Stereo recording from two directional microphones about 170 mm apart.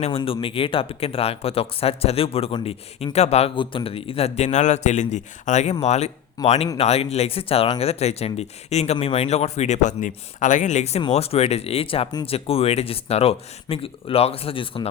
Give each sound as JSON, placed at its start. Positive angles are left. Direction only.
{"t": 0.2, "sound": "speech", "side_deg": 30}